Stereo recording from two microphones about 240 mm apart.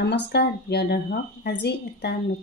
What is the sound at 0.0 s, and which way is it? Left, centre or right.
Speech, left.